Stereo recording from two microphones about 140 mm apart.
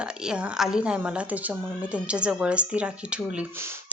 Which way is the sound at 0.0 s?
5° right (ahead or behind).